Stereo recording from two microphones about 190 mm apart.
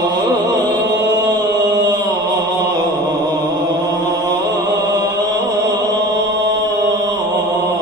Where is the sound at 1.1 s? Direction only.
20° right (ahead or behind).